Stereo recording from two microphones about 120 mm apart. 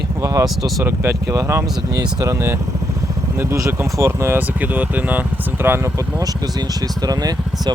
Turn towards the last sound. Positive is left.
turn(degrees=-30)  # may be behind; listen again after turning